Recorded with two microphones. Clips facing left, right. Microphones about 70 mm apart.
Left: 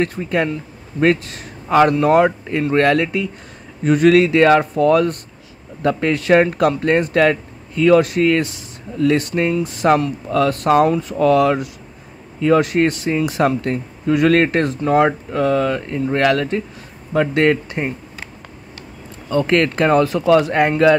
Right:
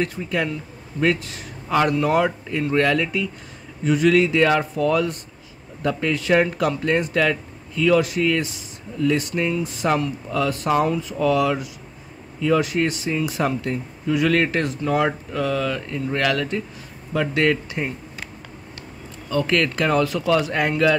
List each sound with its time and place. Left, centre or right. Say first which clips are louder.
0.0 s speech: left 5 dB; left
19.3 s speech: left 5 dB; left